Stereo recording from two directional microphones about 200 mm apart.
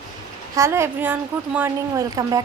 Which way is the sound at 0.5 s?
15° right (ahead or behind).